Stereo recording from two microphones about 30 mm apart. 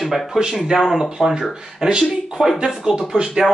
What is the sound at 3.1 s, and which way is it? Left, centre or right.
Speech, centre.